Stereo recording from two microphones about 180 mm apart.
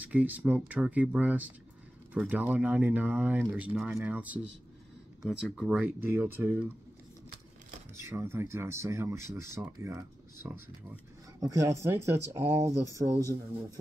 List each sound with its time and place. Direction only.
0.0 s speech: 10° right (ahead or behind)
8.0 s speech: 15° right (ahead or behind)